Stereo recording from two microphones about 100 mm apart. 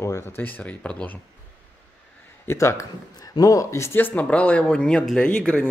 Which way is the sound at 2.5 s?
30° left (ahead or behind).